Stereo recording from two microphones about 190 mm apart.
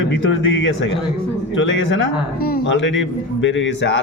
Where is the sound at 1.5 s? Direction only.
80° left.